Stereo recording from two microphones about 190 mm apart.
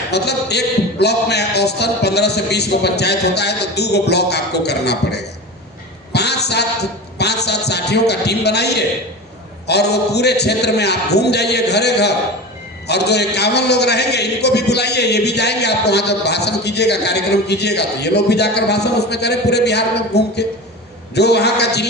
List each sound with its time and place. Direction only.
0.1 s a man's voice: 60° left (ahead or behind)
6.1 s a sound: 60° left (ahead or behind)
7.2 s a man's voice: 60° left (ahead or behind)